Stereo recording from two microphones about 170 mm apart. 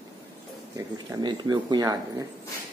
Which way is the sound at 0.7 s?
25° right (ahead or behind).